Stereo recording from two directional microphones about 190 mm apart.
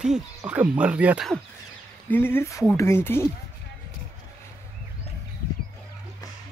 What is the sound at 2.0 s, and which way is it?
Speech, 10° left (ahead or behind).